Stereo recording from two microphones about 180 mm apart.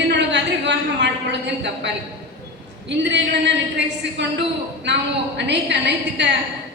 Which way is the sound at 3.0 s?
75° right (ahead or behind).